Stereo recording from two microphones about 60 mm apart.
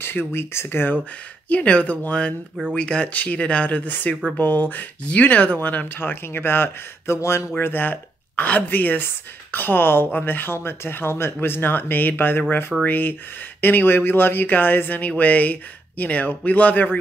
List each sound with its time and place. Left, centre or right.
0.0 s speech: left
1.5 s speech: left